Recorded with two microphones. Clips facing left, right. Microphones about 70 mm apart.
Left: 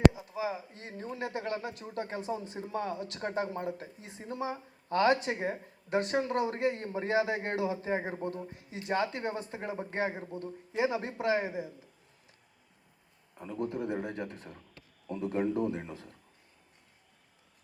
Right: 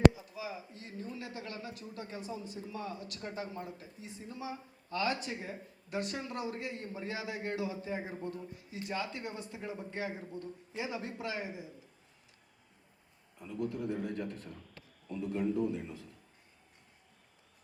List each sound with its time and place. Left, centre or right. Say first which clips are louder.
0.1 s a sound: left 3 dB; left
0.3 s speech: left 7 dB; left
3.2 s speech: left 8 dB; left
13.4 s a man's voice: left 2 dB; left